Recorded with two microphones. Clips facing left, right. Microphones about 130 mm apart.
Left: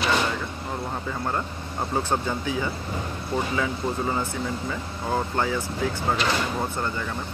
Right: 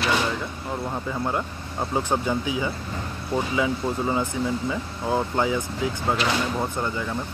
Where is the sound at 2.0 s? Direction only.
15° right (ahead or behind).